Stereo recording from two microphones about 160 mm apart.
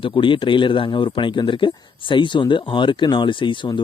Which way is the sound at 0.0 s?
30° left (ahead or behind).